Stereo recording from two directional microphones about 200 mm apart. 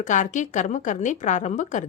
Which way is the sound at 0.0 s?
40° left (ahead or behind).